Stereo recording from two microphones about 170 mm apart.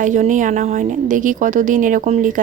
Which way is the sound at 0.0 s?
45° right (ahead or behind).